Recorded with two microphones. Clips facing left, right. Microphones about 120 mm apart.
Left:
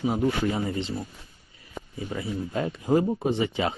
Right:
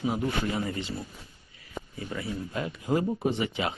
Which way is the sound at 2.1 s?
25° left (ahead or behind).